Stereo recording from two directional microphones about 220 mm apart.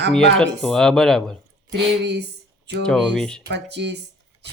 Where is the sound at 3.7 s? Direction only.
50° right (ahead or behind).